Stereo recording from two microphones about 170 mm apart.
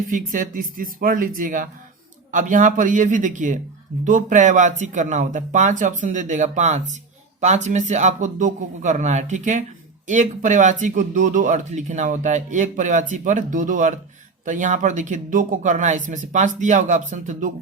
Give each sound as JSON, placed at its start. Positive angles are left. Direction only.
{"t": 0.1, "sound": "speech", "side_deg": -50}